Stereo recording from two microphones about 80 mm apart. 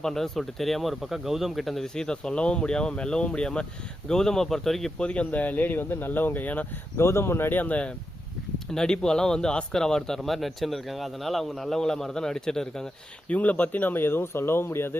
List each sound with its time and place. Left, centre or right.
0.0 s speech: centre
4.9 s speech: centre
6.9 s speech: left; by 12.9 s centre
13.2 s speech: centre